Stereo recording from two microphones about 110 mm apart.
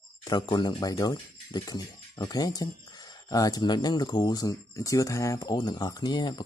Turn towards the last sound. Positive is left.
turn(degrees=40)  # may be behind; listen again after turning